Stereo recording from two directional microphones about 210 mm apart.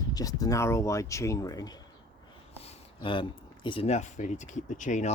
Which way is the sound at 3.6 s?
30° left (ahead or behind).